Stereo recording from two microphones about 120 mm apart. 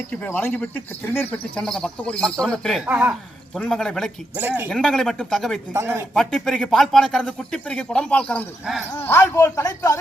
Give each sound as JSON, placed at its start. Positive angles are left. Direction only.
{"t": 0.1, "sound": "speech", "side_deg": 15}
{"t": 2.8, "sound": "speech", "side_deg": -10}
{"t": 3.5, "sound": "speech", "side_deg": 5}
{"t": 4.4, "sound": "speech", "side_deg": -15}
{"t": 4.7, "sound": "speech", "side_deg": 5}
{"t": 5.7, "sound": "speech", "side_deg": -20}
{"t": 6.1, "sound": "a man's voice", "side_deg": 5}